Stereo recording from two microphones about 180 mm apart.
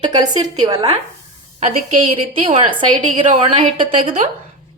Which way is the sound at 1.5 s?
45° right (ahead or behind).